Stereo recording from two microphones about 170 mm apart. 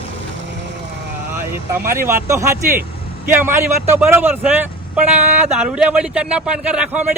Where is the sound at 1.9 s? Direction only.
15° right (ahead or behind).